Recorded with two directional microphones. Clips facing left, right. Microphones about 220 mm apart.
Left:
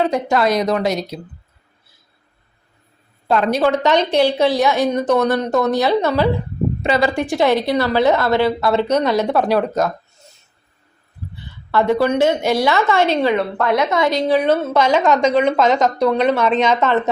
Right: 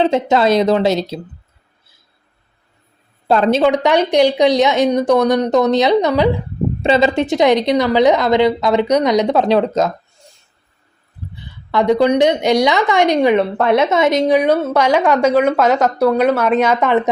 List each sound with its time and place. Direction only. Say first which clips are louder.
0.0 s speech: right 3 dB; 25° right (ahead or behind)
3.2 s a woman's voice: right 4 dB; 30° right (ahead or behind)
3.6 s a woman's voice: right 2 dB; 15° right (ahead or behind)
11.7 s a woman's voice: right 3 dB; 15° right (ahead or behind)